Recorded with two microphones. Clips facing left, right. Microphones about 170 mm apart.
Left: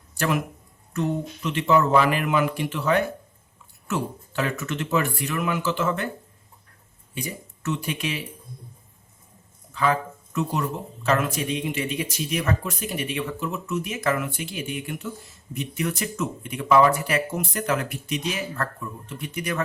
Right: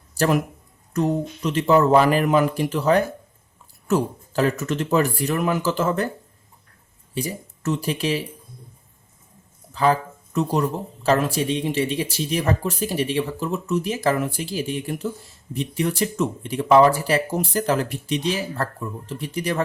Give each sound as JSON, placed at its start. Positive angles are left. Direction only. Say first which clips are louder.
{"t": 0.2, "sound": "speech", "louder": "right 5 dB", "side_deg": -40}
{"t": 7.1, "sound": "speech", "louder": "right 5 dB", "side_deg": -35}
{"t": 9.7, "sound": "speech", "louder": "right 4 dB", "side_deg": -35}